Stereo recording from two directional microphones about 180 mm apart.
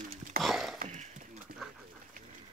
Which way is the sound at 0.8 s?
45° right (ahead or behind).